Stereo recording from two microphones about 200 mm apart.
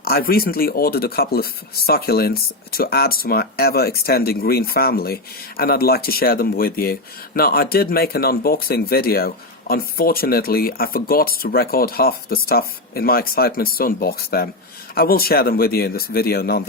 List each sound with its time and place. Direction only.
0.0 s speech: 50° left (ahead or behind)